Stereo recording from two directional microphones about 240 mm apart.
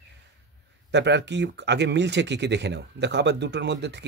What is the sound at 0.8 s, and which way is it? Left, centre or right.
Speech, right.